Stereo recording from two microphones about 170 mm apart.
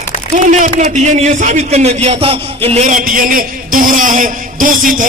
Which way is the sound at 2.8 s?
50° right (ahead or behind).